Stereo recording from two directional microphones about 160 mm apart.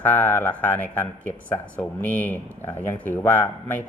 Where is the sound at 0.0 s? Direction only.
10° left (ahead or behind).